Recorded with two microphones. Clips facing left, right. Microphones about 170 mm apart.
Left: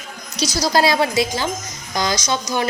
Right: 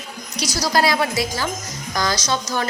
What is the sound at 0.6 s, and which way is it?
A woman's voice, 25° left (ahead or behind).